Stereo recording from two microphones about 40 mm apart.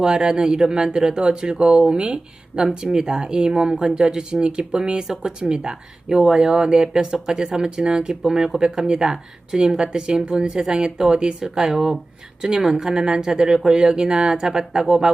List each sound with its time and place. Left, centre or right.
0.0 s speech: centre